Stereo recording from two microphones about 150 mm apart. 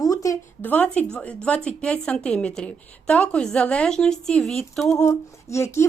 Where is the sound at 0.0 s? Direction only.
25° left (ahead or behind).